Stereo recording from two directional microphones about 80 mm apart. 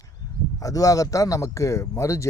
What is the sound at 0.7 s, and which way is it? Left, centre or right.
Speech, left.